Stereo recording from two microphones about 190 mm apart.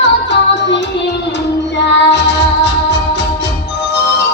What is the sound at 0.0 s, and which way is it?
Music, 70° left (ahead or behind).